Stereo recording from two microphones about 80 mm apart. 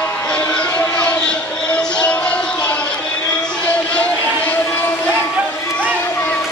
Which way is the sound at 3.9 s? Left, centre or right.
Centre.